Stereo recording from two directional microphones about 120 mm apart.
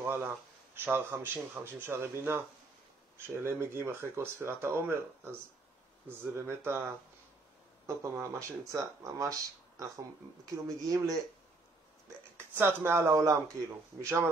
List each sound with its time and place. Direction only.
0.0 s speech: 20° right (ahead or behind)
12.4 s speech: 20° right (ahead or behind)